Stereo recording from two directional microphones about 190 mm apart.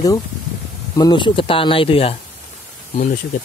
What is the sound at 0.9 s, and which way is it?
Speech, 20° left (ahead or behind).